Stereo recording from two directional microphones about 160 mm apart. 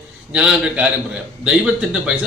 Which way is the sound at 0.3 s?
5° right (ahead or behind).